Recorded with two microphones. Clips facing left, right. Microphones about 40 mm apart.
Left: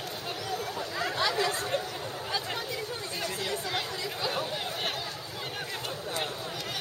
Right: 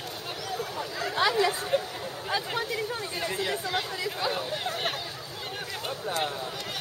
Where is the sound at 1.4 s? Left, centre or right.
Centre.